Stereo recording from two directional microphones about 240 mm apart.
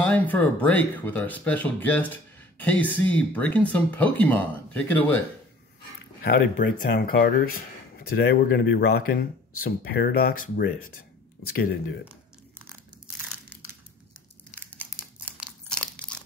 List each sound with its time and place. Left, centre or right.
0.0 s speech: centre
6.2 s speech: left
11.5 s speech: left
12.0 s crumpling: centre
14.7 s crumpling: centre